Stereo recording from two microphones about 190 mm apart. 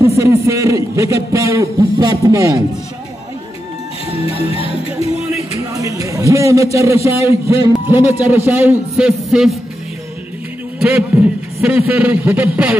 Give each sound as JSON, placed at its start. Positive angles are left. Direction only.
{"t": 0.2, "sound": "a man's voice", "side_deg": -15}
{"t": 4.3, "sound": "music", "side_deg": 30}
{"t": 5.8, "sound": "a man's voice", "side_deg": -15}
{"t": 10.8, "sound": "a man's voice", "side_deg": -5}